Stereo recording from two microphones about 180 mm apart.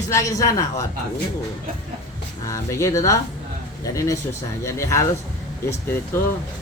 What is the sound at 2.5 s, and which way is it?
Speech, 15° left (ahead or behind).